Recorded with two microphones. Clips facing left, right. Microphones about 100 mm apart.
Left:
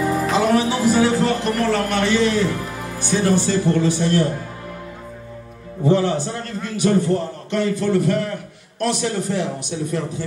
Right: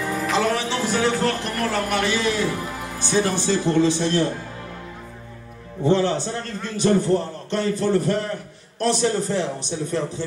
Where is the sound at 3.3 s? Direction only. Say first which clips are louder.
Left 3 dB; 20° right (ahead or behind).